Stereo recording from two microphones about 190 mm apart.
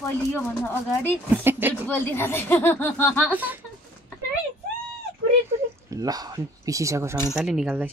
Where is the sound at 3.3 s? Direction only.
10° right (ahead or behind).